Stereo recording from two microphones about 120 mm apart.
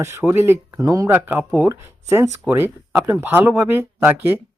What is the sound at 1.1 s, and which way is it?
Speech, 15° right (ahead or behind).